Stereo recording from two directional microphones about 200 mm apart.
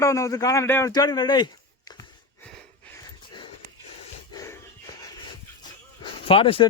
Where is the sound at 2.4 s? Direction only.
10° left (ahead or behind).